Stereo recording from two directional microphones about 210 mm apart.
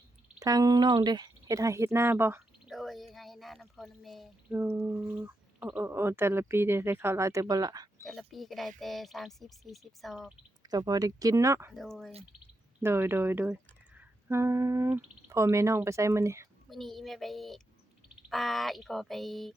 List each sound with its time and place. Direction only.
0.3 s speech: 15° right (ahead or behind)
2.7 s a sound: centre (ahead or behind)
4.5 s speech: 10° right (ahead or behind)
8.0 s speech: centre (ahead or behind)
10.6 s speech: 20° right (ahead or behind)
11.7 s speech: centre (ahead or behind)
12.8 s speech: 10° right (ahead or behind)
16.6 s speech: centre (ahead or behind)